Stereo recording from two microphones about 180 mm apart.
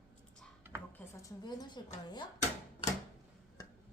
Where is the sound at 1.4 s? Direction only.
25° left (ahead or behind).